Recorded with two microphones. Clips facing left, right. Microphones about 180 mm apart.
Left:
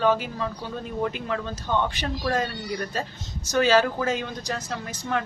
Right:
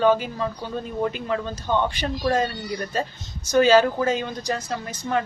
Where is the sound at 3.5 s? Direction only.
Centre (ahead or behind).